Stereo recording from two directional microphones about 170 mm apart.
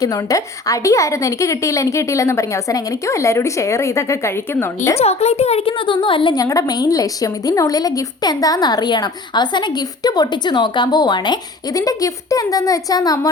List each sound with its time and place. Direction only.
0.0 s a woman's voice: 20° left (ahead or behind)
4.9 s a woman's voice: 40° left (ahead or behind); by 13.1 s 20° left (ahead or behind)